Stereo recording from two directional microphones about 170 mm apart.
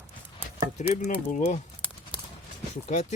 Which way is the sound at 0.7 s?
45° left (ahead or behind).